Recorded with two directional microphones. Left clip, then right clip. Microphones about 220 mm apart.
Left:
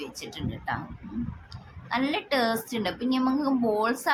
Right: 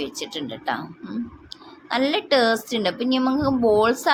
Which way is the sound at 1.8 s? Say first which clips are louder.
Right 6 dB; 30° right (ahead or behind).